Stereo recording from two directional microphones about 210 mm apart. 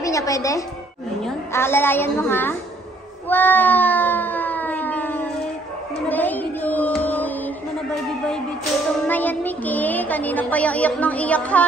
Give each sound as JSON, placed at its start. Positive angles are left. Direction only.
{"t": 0.0, "sound": "a woman's voice", "side_deg": 15}
{"t": 3.3, "sound": "cat", "side_deg": 10}
{"t": 6.0, "sound": "music", "side_deg": 10}
{"t": 9.0, "sound": "speech", "side_deg": 10}